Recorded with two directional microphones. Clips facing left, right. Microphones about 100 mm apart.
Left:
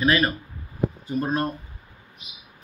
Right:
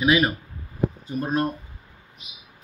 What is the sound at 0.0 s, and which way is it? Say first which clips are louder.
Speech: right 1 dB; 10° right (ahead or behind).